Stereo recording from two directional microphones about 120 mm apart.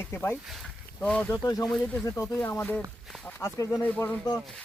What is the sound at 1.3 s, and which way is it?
Speech, 30° left (ahead or behind).